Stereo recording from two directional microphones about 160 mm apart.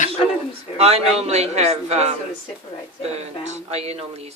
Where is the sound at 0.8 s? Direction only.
40° right (ahead or behind).